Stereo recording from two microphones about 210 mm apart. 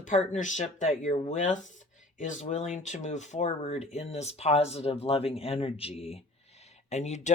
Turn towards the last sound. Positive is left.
turn(degrees=30)  # may be behind; listen again after turning